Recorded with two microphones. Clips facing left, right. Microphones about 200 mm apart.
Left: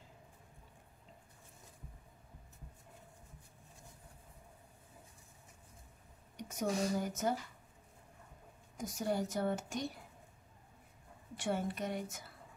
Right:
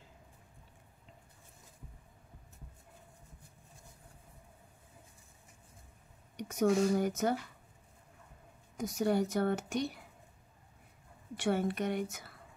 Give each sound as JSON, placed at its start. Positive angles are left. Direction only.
{"t": 6.3, "sound": "speech", "side_deg": -70}
{"t": 8.7, "sound": "speech", "side_deg": -70}
{"t": 11.3, "sound": "speech", "side_deg": -70}